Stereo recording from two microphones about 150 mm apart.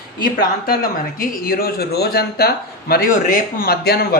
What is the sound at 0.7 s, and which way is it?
Speech, 75° left (ahead or behind).